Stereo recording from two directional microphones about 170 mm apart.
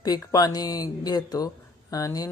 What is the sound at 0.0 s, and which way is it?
Speech, 20° left (ahead or behind).